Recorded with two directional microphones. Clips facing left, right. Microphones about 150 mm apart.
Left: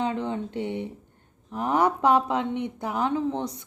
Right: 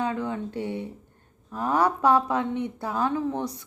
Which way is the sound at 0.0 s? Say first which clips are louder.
Left 1 dB; 25° left (ahead or behind).